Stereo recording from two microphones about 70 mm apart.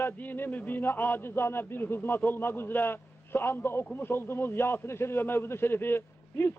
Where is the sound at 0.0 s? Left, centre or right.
Left.